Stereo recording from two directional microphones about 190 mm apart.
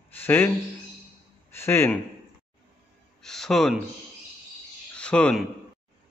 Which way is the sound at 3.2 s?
Centre (ahead or behind).